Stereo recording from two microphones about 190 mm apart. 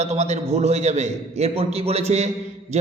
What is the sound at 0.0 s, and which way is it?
A man's voice, 35° right (ahead or behind).